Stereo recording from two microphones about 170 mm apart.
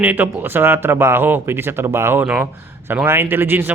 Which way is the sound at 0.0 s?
10° right (ahead or behind).